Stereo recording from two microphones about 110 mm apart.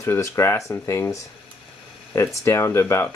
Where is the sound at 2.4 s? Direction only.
25° left (ahead or behind).